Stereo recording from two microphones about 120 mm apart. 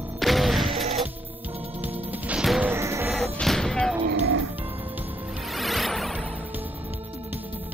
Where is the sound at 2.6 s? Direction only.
20° right (ahead or behind).